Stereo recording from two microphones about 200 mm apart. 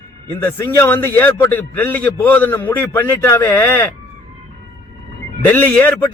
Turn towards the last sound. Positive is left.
turn(degrees=10)  # may be behind; listen again after turning